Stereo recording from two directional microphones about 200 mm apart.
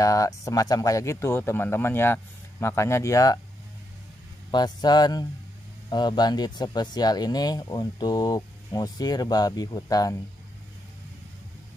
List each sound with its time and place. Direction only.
0.0 s speech: 15° left (ahead or behind)
4.5 s speech: 20° left (ahead or behind)